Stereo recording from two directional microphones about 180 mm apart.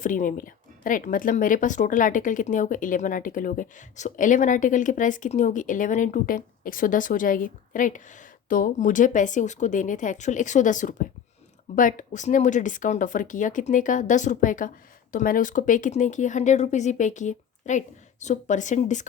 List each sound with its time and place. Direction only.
0.0 s speech: 45° left (ahead or behind)